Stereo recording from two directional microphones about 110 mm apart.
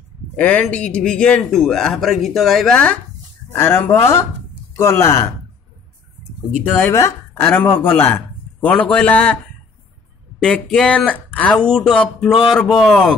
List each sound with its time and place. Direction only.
0.4 s speech: 15° left (ahead or behind)
3.5 s speech: 20° left (ahead or behind)
6.8 s speech: 25° left (ahead or behind)
10.4 s speech: 5° left (ahead or behind)